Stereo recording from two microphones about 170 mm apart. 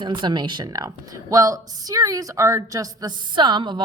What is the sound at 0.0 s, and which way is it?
Speech, 25° right (ahead or behind).